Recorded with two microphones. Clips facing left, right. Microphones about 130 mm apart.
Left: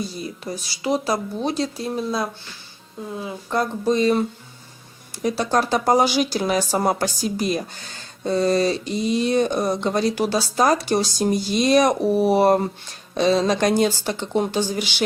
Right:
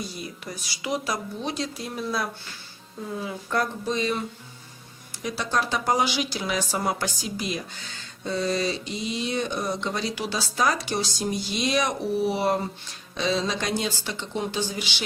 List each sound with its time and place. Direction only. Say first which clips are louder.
0.0 s speech: left 6 dB; 30° left (ahead or behind)
3.2 s speech: left 3 dB; 25° left (ahead or behind)
3.8 s speech: left 8 dB; 40° left (ahead or behind)
5.2 s speech: left 6 dB; 45° left (ahead or behind)